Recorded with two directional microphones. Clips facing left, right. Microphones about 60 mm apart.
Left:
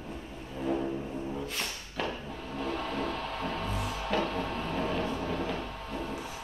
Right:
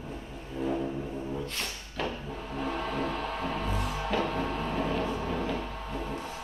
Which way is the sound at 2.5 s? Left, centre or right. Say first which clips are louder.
Right 1 dB; centre.